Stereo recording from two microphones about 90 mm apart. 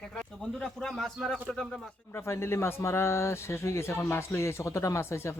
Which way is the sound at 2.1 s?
30° left (ahead or behind).